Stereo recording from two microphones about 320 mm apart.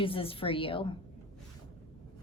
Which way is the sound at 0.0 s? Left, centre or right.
Centre.